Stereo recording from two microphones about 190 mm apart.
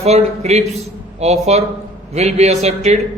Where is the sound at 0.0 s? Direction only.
35° right (ahead or behind).